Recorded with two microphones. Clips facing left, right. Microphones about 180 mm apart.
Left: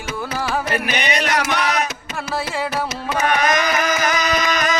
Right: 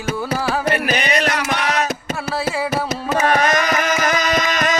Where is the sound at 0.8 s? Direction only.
35° right (ahead or behind).